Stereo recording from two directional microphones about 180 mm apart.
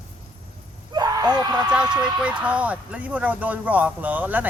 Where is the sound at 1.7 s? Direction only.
5° right (ahead or behind).